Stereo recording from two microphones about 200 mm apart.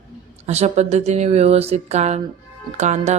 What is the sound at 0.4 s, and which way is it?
Speech, 30° right (ahead or behind).